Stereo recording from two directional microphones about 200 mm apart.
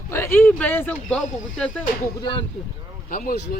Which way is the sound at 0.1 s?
10° left (ahead or behind).